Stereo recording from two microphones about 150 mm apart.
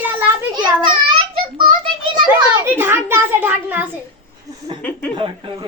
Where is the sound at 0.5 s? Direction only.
35° right (ahead or behind).